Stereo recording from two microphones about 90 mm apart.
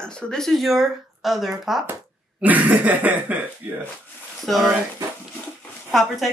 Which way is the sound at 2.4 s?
20° right (ahead or behind).